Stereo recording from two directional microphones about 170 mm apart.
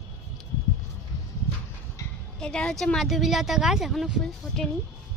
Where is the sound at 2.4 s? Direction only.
5° left (ahead or behind).